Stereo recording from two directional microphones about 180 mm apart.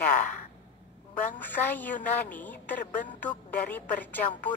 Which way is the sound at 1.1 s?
10° left (ahead or behind).